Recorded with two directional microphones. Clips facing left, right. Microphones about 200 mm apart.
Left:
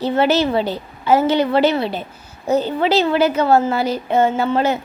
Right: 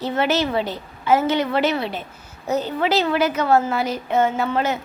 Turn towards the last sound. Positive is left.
turn(degrees=30)  # may be behind; listen again after turning